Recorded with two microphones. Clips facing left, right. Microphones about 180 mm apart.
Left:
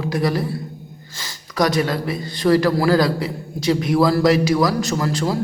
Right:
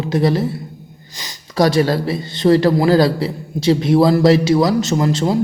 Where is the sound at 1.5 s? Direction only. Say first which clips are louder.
Right 4 dB; 30° right (ahead or behind).